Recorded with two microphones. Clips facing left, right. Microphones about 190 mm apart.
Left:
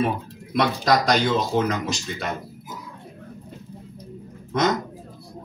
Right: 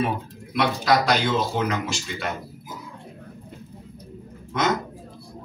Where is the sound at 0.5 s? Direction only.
45° left (ahead or behind).